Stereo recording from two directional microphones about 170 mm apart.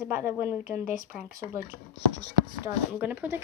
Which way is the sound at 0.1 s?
10° right (ahead or behind).